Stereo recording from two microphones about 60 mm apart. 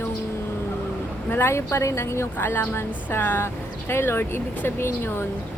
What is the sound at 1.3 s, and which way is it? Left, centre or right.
A woman's voice, left.